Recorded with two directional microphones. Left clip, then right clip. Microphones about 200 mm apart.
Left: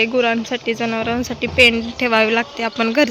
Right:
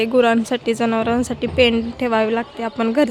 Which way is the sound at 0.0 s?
20° right (ahead or behind).